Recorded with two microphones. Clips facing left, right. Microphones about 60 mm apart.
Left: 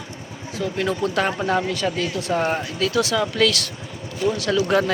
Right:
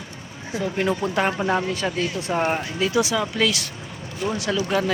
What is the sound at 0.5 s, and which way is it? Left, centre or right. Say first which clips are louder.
Speech: right 1 dB; centre.